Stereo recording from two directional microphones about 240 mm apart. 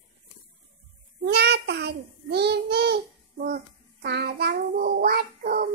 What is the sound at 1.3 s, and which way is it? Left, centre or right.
Child singing, right.